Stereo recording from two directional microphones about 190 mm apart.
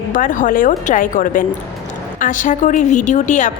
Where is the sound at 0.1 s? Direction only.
45° left (ahead or behind).